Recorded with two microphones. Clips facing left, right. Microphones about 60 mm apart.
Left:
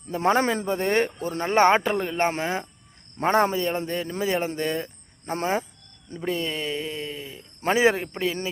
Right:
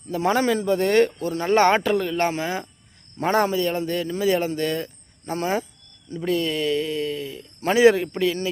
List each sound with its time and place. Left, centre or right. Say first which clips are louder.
0.1 s a man's voice: right 1 dB; left
0.8 s a man's voice: right 4 dB; centre; by 3.3 s left
3.8 s speech: right 3 dB; left